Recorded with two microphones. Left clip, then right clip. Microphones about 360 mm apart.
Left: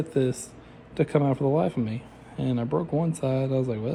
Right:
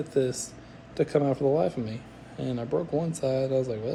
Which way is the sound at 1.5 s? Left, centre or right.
Centre.